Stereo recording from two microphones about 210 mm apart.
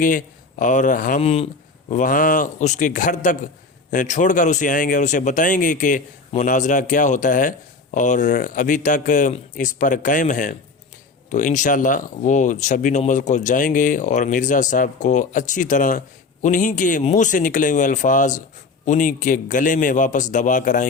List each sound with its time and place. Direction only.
0.0 s speech: 40° left (ahead or behind)
1.9 s speech: 40° left (ahead or behind)